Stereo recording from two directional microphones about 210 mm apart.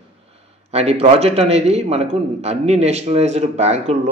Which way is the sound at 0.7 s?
30° right (ahead or behind).